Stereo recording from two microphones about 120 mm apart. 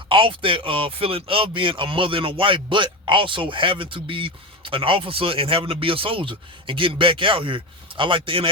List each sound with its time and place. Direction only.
0.1 s speech: 45° right (ahead or behind)